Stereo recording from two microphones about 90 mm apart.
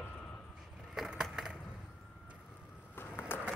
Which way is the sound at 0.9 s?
5° right (ahead or behind).